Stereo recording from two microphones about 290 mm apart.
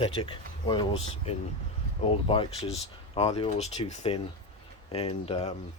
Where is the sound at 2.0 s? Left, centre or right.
Centre.